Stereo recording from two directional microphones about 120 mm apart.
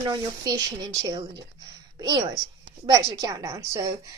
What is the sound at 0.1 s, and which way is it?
Speech, 30° right (ahead or behind).